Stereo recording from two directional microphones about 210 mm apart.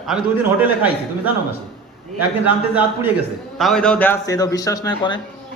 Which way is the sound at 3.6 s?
Centre (ahead or behind).